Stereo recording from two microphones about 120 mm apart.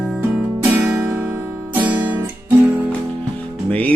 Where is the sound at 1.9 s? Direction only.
40° right (ahead or behind).